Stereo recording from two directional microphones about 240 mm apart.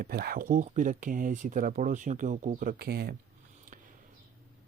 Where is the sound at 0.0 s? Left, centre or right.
Right.